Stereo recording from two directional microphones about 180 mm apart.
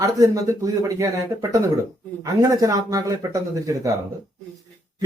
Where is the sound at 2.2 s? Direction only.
20° right (ahead or behind).